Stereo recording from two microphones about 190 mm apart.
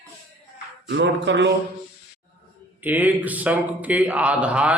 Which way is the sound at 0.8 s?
70° right (ahead or behind).